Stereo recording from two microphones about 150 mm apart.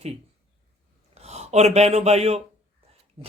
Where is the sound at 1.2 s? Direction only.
45° right (ahead or behind).